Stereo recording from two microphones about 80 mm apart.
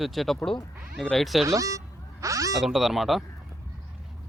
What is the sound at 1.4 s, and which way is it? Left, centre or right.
Speech, right.